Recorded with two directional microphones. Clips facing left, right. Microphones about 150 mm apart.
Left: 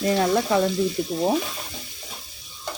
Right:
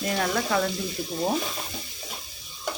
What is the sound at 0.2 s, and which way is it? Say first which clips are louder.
Speech: left 3 dB; 25° left (ahead or behind).